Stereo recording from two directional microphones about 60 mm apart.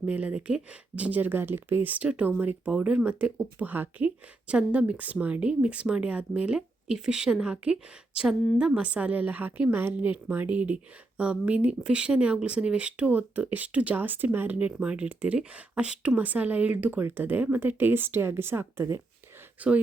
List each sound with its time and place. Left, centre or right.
0.1 s speech: right
2.6 s speech: centre
3.3 s speech: right
19.5 s speech: right